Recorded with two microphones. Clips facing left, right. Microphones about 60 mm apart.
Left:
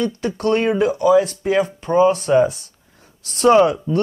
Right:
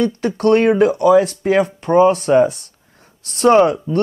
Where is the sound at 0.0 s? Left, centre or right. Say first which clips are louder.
Right 4 dB; right.